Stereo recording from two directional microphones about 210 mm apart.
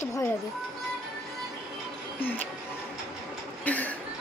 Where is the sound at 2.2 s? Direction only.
10° left (ahead or behind).